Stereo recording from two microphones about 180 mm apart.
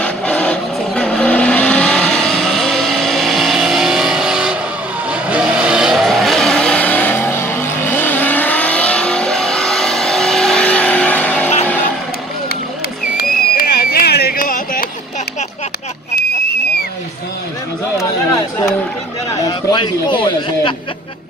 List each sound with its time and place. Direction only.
0.0 s vehicle: 5° left (ahead or behind)
13.2 s music: 55° left (ahead or behind)
19.4 s a sound: 25° left (ahead or behind)